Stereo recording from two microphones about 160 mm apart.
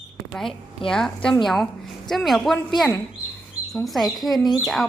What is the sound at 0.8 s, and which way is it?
A woman's voice, 5° left (ahead or behind).